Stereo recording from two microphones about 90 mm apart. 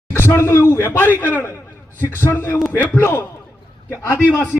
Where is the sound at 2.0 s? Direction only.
25° left (ahead or behind).